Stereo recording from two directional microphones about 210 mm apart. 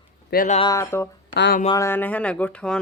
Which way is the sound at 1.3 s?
50° left (ahead or behind).